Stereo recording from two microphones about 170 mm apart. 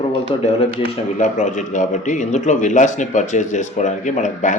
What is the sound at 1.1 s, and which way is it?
A man's voice, 45° left (ahead or behind).